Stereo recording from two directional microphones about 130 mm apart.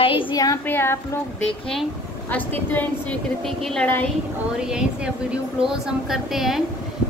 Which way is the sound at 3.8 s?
15° left (ahead or behind).